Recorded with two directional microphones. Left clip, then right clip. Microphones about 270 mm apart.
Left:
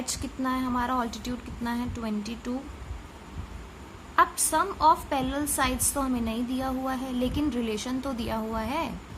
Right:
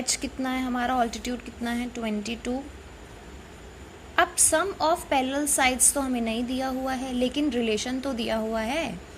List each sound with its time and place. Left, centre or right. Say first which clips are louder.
0.0 s a woman's voice: right 2 dB; centre
4.1 s a woman's voice: right 1 dB; centre